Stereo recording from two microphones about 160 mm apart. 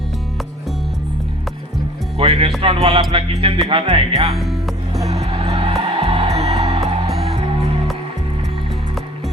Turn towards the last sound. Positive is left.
turn(degrees=-35)  # may be behind; listen again after turning